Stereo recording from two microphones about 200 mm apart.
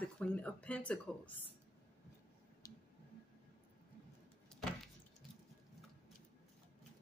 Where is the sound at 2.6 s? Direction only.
15° left (ahead or behind).